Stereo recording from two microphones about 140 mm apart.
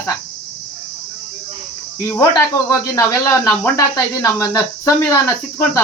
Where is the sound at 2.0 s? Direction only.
15° left (ahead or behind).